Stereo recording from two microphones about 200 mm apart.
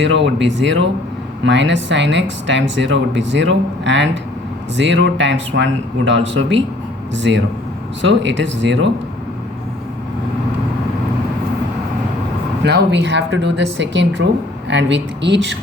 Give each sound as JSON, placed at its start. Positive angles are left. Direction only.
{"t": 0.0, "sound": "speech", "side_deg": -65}
{"t": 12.6, "sound": "speech", "side_deg": -60}